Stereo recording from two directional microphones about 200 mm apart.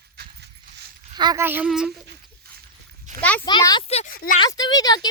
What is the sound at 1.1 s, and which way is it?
Speech, 20° right (ahead or behind).